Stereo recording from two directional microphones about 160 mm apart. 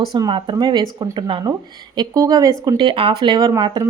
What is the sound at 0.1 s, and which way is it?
A woman's voice, 30° right (ahead or behind).